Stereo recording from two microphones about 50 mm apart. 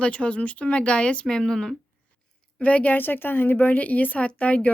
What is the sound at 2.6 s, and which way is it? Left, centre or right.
Speech, left.